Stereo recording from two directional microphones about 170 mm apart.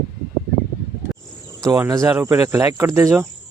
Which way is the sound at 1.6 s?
20° right (ahead or behind).